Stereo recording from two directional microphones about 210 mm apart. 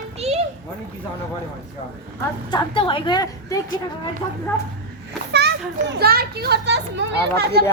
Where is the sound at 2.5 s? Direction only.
20° left (ahead or behind).